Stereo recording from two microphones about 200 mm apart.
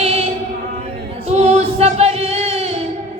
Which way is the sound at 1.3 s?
30° right (ahead or behind).